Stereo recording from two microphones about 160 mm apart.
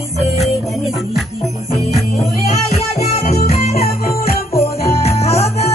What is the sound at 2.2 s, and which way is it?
Music, 40° left (ahead or behind).